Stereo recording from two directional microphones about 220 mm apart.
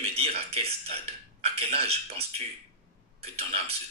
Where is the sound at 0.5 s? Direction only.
25° right (ahead or behind).